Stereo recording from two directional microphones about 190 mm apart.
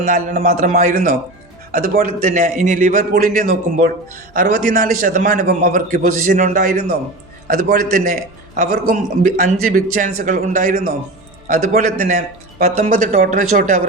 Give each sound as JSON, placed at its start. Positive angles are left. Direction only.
{"t": 0.1, "sound": "a man's voice", "side_deg": -45}